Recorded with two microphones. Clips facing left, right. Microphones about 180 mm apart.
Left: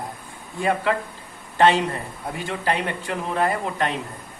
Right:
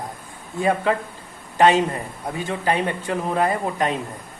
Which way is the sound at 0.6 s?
20° right (ahead or behind).